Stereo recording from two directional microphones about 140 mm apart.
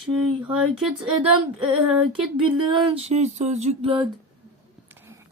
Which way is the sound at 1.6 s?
5° right (ahead or behind).